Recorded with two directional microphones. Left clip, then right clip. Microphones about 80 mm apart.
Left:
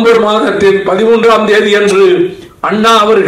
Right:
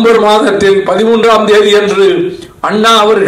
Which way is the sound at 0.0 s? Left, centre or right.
Right.